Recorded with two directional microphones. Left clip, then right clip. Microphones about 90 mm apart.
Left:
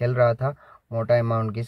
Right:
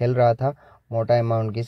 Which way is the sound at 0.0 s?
35° right (ahead or behind).